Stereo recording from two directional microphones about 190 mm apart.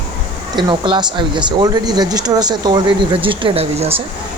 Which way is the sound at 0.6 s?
25° right (ahead or behind).